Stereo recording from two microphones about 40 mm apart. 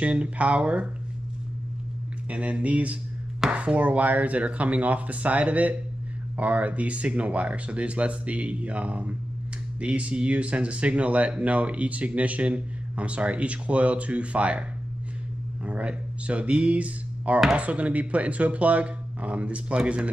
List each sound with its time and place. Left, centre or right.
0.0 s speech: right
2.2 s speech: right
15.6 s speech: right